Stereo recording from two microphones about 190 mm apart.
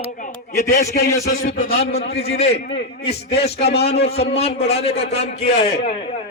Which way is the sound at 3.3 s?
60° left (ahead or behind).